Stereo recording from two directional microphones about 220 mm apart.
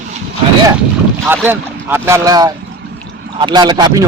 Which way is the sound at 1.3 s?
10° right (ahead or behind).